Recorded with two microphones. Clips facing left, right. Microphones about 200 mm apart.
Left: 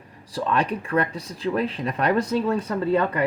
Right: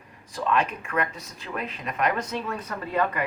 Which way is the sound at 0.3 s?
35° left (ahead or behind).